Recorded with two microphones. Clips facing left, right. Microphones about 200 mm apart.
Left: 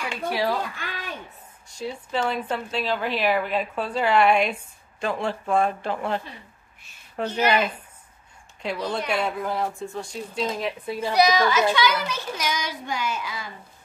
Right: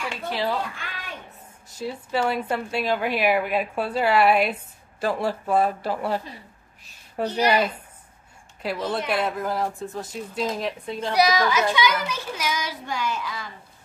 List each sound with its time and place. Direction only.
0.1 s speech: 10° left (ahead or behind)
1.8 s a woman's voice: 5° right (ahead or behind)
7.2 s a woman's voice: 35° right (ahead or behind)
8.8 s speech: 5° right (ahead or behind)
11.1 s a woman's voice: 5° right (ahead or behind)